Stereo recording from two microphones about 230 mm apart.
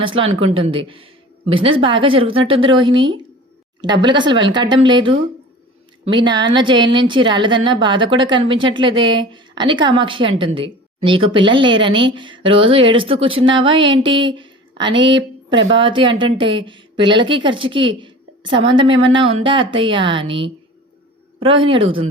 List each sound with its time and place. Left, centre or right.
0.0 s a woman's voice: right
1.6 s a woman's voice: right